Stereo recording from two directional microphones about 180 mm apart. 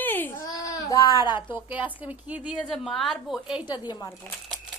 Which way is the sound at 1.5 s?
10° right (ahead or behind).